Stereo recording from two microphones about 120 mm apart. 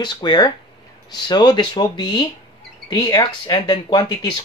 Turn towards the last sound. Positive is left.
turn(degrees=35)  # may be behind; listen again after turning